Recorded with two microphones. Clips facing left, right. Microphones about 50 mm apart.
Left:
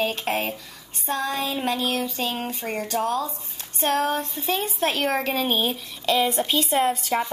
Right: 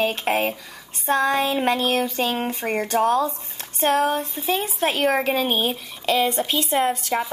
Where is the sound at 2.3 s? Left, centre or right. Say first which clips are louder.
Right 4 dB; right.